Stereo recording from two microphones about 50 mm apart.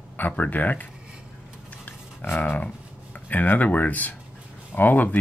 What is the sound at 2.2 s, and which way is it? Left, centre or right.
Speech, left.